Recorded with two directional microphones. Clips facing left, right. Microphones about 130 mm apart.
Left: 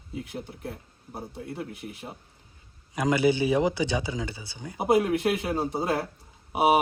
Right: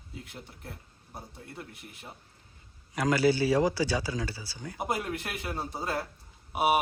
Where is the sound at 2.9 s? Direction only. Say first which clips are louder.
Left 2 dB; 20° left (ahead or behind).